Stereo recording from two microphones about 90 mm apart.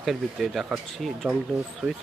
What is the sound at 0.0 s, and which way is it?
Speech, centre (ahead or behind).